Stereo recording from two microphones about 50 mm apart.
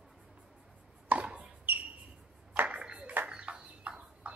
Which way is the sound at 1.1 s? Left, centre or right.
Right.